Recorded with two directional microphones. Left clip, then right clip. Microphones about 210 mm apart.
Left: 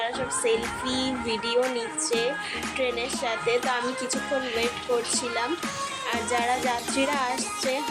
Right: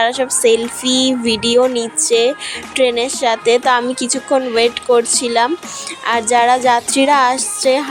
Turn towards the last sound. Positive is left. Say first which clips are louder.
# right 13 dB
turn(degrees=-40)  # may be behind; listen again after turning